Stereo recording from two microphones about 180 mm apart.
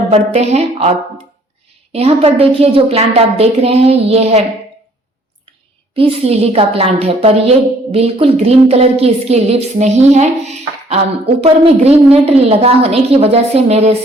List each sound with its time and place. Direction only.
0.1 s a woman's voice: 35° right (ahead or behind)
5.9 s a woman's voice: 35° right (ahead or behind)